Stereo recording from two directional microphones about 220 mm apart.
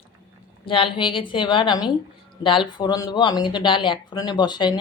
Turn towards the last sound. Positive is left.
turn(degrees=20)  # may be behind; listen again after turning